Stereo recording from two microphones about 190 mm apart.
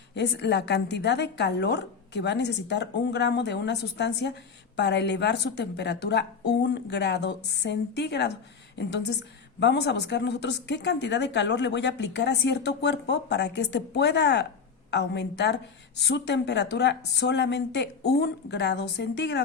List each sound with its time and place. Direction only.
0.1 s a woman's voice: 65° left (ahead or behind)